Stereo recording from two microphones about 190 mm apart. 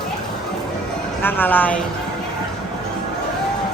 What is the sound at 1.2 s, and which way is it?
Speech, 10° left (ahead or behind).